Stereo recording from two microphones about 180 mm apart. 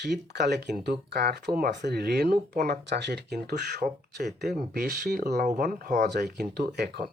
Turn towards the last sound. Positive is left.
turn(degrees=-65)  # may be behind; listen again after turning